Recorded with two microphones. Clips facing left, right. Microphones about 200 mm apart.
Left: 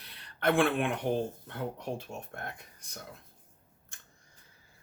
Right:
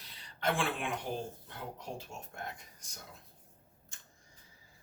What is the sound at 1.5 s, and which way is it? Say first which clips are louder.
Speech: left 7 dB; 60° left (ahead or behind).